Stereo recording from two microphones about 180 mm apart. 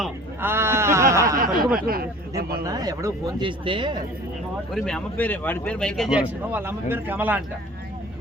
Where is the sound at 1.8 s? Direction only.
55° right (ahead or behind).